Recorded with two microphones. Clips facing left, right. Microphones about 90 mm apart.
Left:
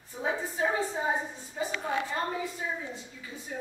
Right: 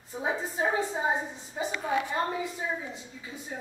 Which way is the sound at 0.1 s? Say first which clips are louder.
Right 1 dB; 20° right (ahead or behind).